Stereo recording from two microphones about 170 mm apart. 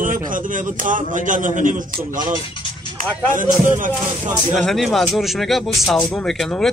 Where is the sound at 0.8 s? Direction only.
50° right (ahead or behind).